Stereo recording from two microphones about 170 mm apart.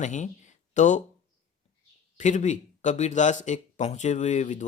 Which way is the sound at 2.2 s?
45° left (ahead or behind).